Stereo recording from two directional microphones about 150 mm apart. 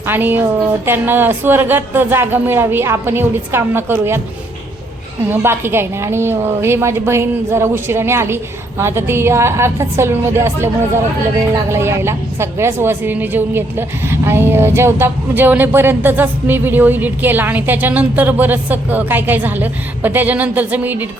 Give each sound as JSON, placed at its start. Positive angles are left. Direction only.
{"t": 0.0, "sound": "a woman's voice", "side_deg": -15}
{"t": 5.3, "sound": "a woman's voice", "side_deg": -15}